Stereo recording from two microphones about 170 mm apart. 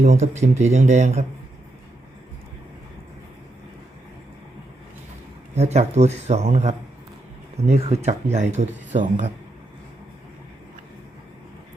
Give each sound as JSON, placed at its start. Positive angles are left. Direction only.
{"t": 0.0, "sound": "speech", "side_deg": -40}
{"t": 5.5, "sound": "speech", "side_deg": -40}